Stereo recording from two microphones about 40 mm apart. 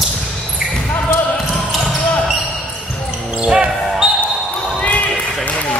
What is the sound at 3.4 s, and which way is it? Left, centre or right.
Basketball bounce, right.